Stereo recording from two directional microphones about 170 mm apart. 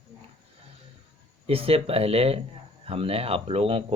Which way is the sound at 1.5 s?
35° right (ahead or behind).